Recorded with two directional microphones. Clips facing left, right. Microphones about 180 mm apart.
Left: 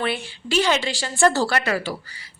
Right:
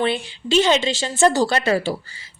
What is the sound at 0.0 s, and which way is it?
A woman's voice, 25° right (ahead or behind).